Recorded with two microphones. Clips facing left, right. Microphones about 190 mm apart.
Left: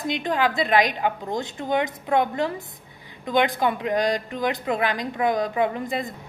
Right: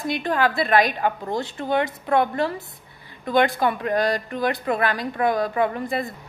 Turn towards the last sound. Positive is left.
turn(degrees=15)  # may be behind; listen again after turning